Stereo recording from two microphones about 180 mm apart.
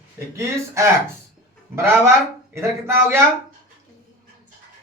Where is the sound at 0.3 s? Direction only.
15° right (ahead or behind).